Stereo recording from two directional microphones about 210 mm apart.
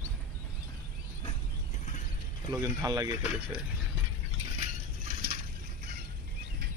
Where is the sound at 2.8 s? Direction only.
20° right (ahead or behind).